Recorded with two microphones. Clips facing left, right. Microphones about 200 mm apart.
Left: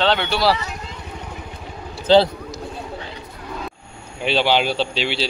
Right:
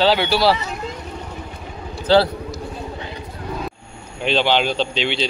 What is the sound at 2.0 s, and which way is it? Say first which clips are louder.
Speech: left 1 dB; 20° left (ahead or behind).